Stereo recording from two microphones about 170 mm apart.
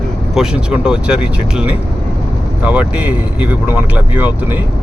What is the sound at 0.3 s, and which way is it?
Speech, 5° right (ahead or behind).